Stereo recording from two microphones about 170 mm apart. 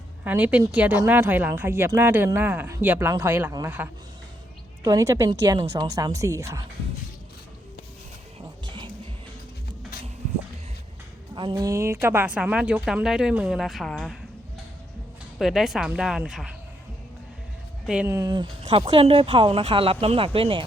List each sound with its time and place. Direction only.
0.3 s speech: 10° right (ahead or behind)
8.6 s music: 30° right (ahead or behind)
11.3 s speech: 25° right (ahead or behind); by 14.2 s 5° left (ahead or behind)
15.4 s a woman's voice: centre (ahead or behind)
17.8 s speech: 10° right (ahead or behind); by 20.7 s 30° right (ahead or behind)